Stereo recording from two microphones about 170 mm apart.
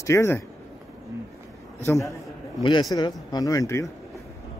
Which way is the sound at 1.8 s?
15° left (ahead or behind).